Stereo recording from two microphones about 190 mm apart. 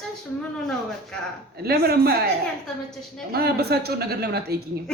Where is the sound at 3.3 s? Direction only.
55° right (ahead or behind).